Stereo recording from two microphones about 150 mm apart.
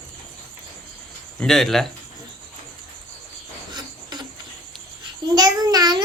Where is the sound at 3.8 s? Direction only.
30° right (ahead or behind).